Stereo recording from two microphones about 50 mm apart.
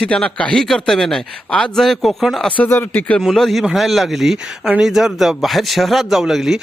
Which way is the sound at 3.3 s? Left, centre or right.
Centre.